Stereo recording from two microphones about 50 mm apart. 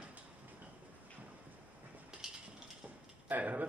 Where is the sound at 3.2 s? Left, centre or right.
Right.